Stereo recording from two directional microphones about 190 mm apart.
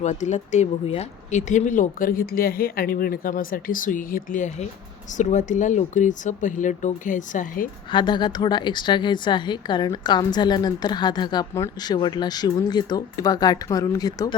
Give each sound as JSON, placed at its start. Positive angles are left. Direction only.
{"t": 0.0, "sound": "speech", "side_deg": 40}
{"t": 7.9, "sound": "speech", "side_deg": 25}